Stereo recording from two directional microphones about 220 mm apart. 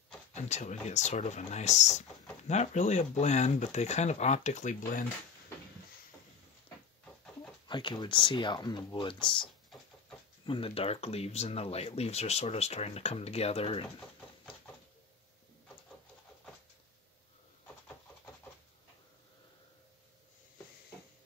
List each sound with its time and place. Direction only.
0.3 s speech: 30° left (ahead or behind)
7.6 s speech: 20° left (ahead or behind)